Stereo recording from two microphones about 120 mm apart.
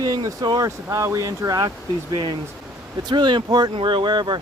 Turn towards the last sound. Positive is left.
turn(degrees=-40)  # may be behind; listen again after turning